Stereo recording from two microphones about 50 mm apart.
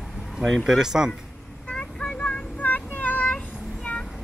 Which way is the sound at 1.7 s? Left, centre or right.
Centre.